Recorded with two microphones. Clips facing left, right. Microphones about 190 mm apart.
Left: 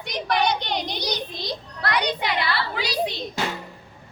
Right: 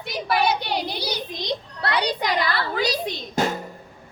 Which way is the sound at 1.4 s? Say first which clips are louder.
Right 2 dB; 25° right (ahead or behind).